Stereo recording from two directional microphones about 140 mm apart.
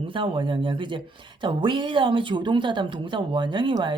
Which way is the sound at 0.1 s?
35° right (ahead or behind).